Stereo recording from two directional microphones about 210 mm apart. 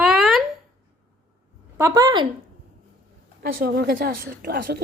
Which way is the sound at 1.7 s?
15° right (ahead or behind).